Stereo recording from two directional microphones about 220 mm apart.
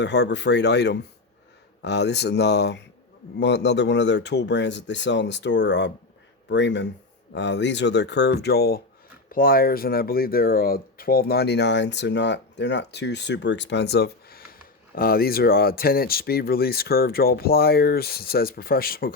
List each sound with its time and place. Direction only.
0.0 s speech: 50° left (ahead or behind)